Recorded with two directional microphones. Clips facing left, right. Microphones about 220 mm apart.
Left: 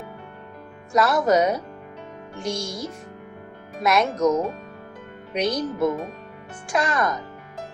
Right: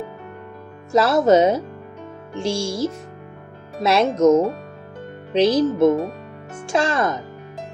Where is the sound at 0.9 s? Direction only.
25° right (ahead or behind).